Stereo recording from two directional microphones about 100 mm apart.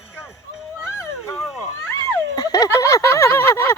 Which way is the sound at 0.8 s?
30° left (ahead or behind).